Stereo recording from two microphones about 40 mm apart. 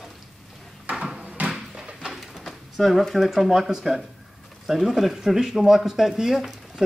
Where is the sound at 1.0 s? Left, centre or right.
Centre.